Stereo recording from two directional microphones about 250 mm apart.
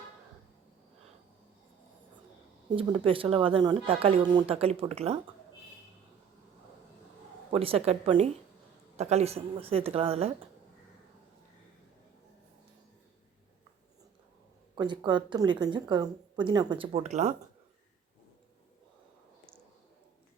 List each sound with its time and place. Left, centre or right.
2.6 s a woman's voice: centre
7.5 s a woman's voice: right
14.8 s a woman's voice: centre